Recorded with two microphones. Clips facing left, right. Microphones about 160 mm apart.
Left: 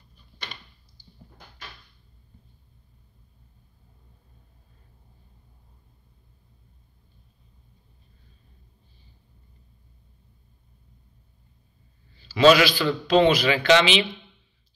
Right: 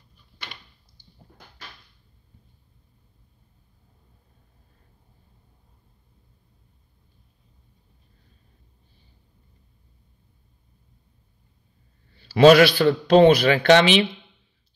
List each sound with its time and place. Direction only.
12.2 s a man's voice: 55° right (ahead or behind)